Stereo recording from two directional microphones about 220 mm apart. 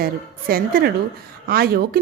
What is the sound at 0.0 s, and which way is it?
Speech, 40° right (ahead or behind).